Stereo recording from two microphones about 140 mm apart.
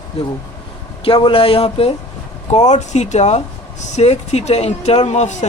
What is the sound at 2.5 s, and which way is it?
Speech, 55° left (ahead or behind).